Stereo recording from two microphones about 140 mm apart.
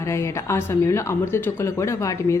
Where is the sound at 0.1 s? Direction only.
20° left (ahead or behind).